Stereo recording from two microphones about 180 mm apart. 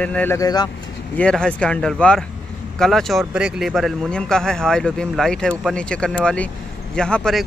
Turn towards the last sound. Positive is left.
turn(degrees=5)  # may be behind; listen again after turning